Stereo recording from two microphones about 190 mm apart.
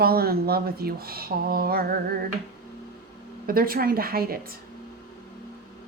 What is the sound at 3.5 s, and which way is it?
Speech, 50° right (ahead or behind).